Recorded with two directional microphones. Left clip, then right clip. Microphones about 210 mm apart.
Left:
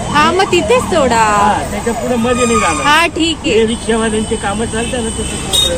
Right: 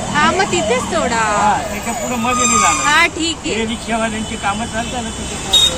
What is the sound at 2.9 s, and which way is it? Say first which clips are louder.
Speech: left 3 dB; 15° left (ahead or behind).